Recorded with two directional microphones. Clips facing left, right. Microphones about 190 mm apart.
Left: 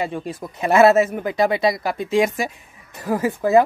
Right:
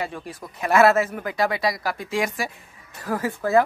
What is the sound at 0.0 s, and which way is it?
Speech, 20° left (ahead or behind).